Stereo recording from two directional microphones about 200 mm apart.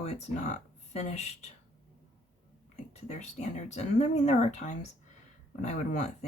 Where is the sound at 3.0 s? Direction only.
35° left (ahead or behind).